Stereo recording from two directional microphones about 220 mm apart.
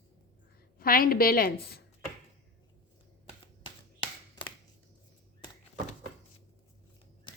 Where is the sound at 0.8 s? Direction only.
40° left (ahead or behind).